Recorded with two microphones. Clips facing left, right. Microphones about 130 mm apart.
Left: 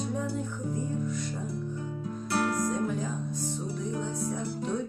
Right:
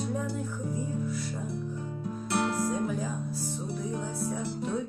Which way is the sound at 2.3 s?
25° right (ahead or behind).